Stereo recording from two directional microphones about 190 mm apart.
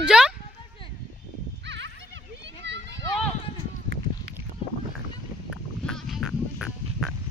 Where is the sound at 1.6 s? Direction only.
70° right (ahead or behind).